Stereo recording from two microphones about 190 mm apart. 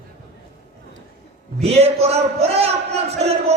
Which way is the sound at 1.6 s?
35° right (ahead or behind).